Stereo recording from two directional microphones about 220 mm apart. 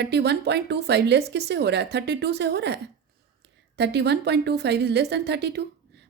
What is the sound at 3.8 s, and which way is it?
A woman's voice, 50° right (ahead or behind).